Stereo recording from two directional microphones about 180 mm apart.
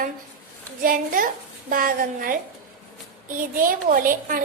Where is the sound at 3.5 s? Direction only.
50° right (ahead or behind).